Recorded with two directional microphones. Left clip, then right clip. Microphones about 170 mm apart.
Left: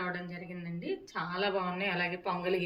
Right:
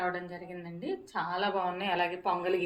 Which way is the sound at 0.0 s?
35° right (ahead or behind).